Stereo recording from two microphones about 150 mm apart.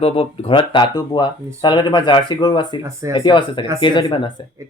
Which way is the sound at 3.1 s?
35° left (ahead or behind).